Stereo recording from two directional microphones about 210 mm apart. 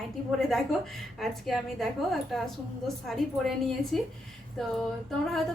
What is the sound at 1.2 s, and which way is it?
Speech, centre (ahead or behind).